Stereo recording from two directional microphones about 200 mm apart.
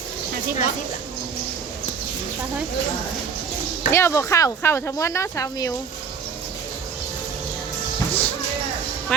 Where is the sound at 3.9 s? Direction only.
10° left (ahead or behind).